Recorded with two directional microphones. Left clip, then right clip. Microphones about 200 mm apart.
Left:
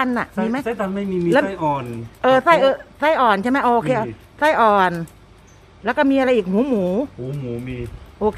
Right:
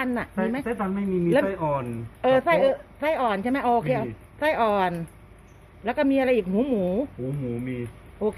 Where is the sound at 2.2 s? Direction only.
15° left (ahead or behind).